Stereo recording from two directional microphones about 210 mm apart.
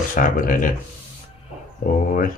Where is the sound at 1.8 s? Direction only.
40° left (ahead or behind).